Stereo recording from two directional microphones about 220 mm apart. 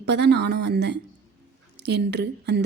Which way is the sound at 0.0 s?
50° right (ahead or behind).